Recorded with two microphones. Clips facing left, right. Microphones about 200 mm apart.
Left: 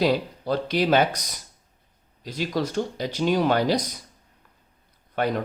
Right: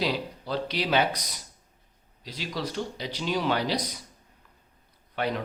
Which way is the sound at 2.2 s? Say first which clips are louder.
Left 7 dB; 50° left (ahead or behind).